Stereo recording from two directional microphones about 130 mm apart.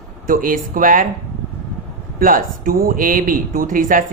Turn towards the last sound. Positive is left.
turn(degrees=-90)